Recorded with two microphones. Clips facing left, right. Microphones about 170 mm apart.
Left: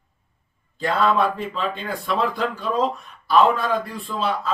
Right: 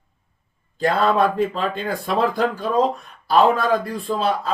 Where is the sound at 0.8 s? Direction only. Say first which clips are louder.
Right 2 dB; 40° right (ahead or behind).